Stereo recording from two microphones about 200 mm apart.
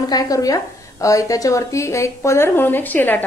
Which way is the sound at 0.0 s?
20° left (ahead or behind).